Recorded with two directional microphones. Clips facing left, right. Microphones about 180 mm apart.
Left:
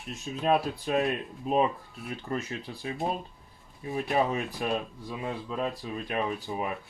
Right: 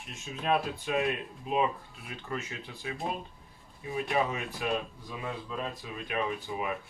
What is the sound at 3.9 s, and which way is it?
Speech, 40° left (ahead or behind).